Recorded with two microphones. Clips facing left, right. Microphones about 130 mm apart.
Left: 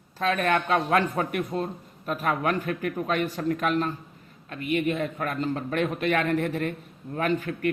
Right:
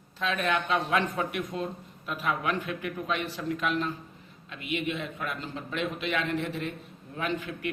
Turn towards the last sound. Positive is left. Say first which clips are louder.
# left 6 dB
turn(degrees=45)  # may be behind; listen again after turning